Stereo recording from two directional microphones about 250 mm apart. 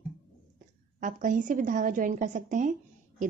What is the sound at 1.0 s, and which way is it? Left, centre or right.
A woman's voice, right.